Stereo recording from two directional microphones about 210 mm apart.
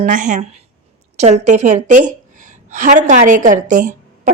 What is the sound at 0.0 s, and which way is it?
A woman's voice, 40° right (ahead or behind).